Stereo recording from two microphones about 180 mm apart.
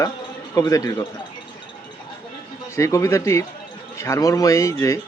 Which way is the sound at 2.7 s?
15° left (ahead or behind).